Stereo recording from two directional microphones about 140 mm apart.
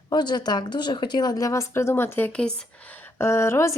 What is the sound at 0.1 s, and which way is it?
Speech, 30° left (ahead or behind).